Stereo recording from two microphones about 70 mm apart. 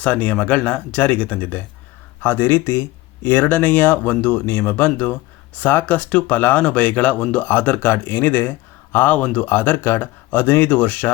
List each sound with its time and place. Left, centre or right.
0.0 s speech: left